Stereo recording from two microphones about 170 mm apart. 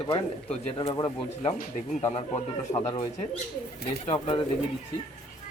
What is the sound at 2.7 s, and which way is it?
Speech, 20° left (ahead or behind).